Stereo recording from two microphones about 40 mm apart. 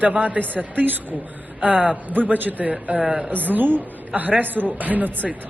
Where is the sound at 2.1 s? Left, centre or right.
Right.